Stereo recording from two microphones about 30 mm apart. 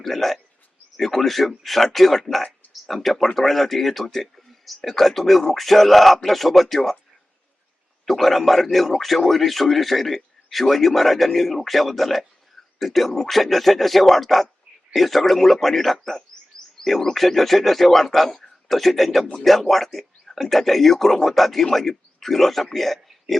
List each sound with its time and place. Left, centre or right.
0.0 s a man's voice: centre
8.0 s a man's voice: centre
16.8 s a sound: centre
17.2 s a man's voice: centre